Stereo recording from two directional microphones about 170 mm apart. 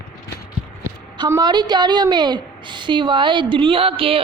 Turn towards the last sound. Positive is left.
turn(degrees=-35)  # may be behind; listen again after turning